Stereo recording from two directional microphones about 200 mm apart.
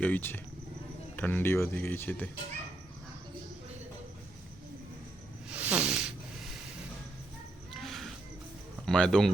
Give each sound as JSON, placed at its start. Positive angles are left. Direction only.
{"t": 0.0, "sound": "speech", "side_deg": 10}
{"t": 5.5, "sound": "a sound", "side_deg": -5}
{"t": 7.8, "sound": "music", "side_deg": 0}
{"t": 8.9, "sound": "speech", "side_deg": 5}